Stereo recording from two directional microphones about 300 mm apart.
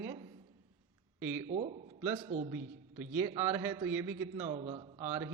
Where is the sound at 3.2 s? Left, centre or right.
Centre.